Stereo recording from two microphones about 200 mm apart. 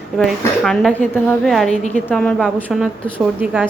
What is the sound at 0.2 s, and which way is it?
A woman's voice, centre (ahead or behind).